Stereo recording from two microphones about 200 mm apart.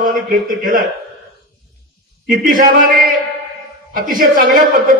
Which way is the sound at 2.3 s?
45° right (ahead or behind).